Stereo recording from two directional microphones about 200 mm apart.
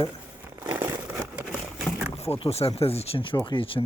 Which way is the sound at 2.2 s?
30° left (ahead or behind).